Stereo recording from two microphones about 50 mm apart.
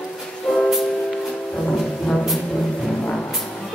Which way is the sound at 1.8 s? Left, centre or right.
Centre.